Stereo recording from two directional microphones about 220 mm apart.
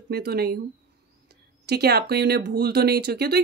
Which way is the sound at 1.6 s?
45° right (ahead or behind).